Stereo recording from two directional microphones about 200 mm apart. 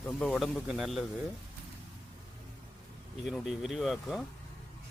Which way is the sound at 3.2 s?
Centre (ahead or behind).